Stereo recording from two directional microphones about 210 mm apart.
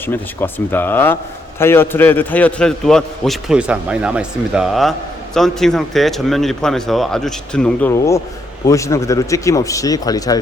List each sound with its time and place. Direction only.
0.1 s a man's voice: 10° left (ahead or behind)